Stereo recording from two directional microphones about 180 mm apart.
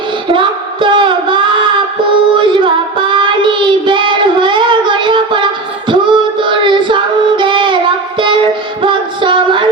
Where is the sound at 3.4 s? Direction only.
25° right (ahead or behind).